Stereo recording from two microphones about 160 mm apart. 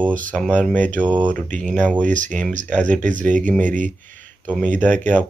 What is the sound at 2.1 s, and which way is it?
Speech, 50° right (ahead or behind).